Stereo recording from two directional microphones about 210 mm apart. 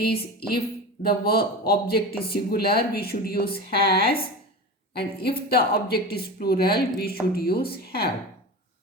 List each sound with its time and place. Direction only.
0.0 s speech: 50° left (ahead or behind)